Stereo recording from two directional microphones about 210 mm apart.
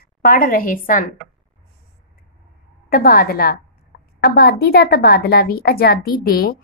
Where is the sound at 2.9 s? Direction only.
45° left (ahead or behind).